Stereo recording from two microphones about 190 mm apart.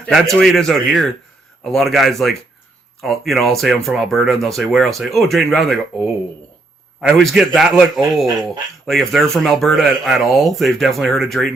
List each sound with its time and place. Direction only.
0.1 s speech: centre (ahead or behind)
7.2 s speech: centre (ahead or behind)